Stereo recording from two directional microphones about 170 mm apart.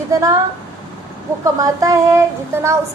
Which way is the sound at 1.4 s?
20° right (ahead or behind).